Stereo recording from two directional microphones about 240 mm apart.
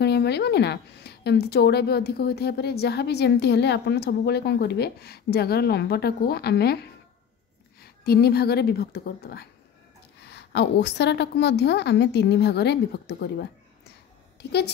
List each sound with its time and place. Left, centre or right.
0.0 s a woman's voice: left